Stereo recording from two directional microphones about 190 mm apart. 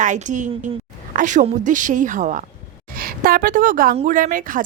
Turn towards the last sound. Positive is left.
turn(degrees=-45)  # may be behind; listen again after turning